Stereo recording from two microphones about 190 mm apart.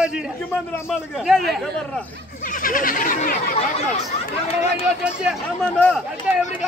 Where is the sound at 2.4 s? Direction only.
45° left (ahead or behind).